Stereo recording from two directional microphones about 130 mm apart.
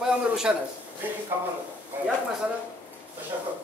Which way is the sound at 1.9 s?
15° right (ahead or behind).